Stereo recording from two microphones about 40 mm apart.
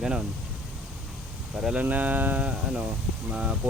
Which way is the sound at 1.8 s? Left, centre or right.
Right.